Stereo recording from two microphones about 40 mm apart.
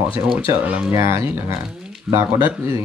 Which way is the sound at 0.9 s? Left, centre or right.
Right.